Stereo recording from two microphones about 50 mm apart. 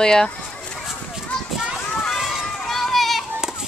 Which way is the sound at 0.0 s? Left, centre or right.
Centre.